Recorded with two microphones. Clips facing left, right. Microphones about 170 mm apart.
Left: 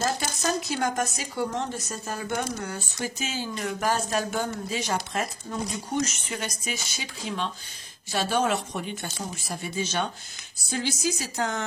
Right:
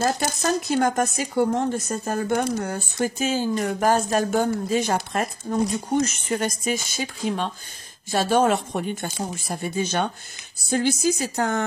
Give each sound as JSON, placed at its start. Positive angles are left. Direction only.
{"t": 0.0, "sound": "speech", "side_deg": -50}